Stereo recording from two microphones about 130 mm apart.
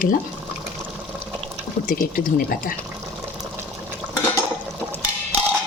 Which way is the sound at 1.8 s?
90° left.